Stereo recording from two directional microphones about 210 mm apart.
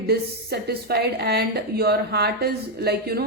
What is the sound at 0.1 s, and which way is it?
A woman's voice, 50° right (ahead or behind).